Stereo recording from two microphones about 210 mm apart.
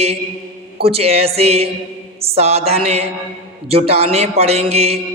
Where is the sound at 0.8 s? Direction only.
30° right (ahead or behind).